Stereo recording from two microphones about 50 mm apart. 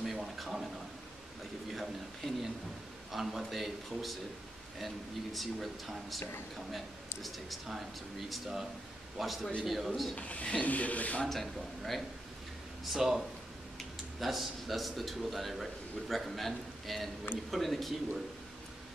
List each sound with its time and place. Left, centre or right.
0.0 s a sound: centre
1.7 s speech: centre
7.2 s speech: centre
10.1 s speech: left
11.2 s speech: centre
12.9 s speech: centre